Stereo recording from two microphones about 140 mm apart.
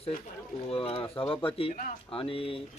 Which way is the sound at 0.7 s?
40° left (ahead or behind).